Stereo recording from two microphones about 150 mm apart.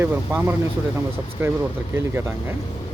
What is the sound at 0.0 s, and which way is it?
Speech, 15° right (ahead or behind).